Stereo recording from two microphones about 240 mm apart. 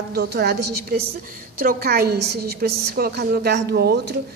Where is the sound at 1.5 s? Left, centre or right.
Right.